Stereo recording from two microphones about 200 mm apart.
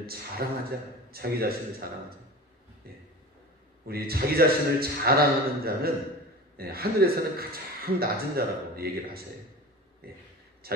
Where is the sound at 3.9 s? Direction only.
50° right (ahead or behind).